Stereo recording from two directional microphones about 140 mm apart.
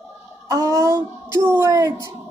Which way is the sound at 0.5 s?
25° right (ahead or behind).